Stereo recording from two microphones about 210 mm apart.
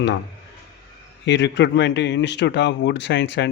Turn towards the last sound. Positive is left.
turn(degrees=55)  # may be behind; listen again after turning